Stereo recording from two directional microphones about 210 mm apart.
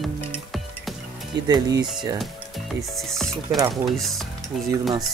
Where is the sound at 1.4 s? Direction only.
20° right (ahead or behind).